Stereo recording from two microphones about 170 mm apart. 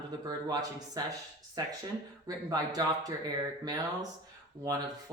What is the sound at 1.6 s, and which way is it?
Speech, 20° right (ahead or behind).